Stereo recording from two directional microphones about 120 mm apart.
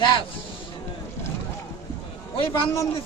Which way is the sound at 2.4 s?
45° left (ahead or behind).